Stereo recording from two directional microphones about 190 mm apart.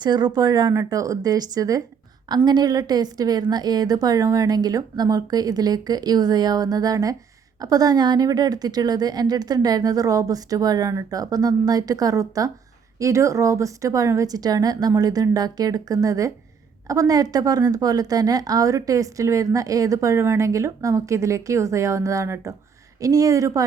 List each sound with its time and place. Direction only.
0.0 s a woman's voice: 25° right (ahead or behind)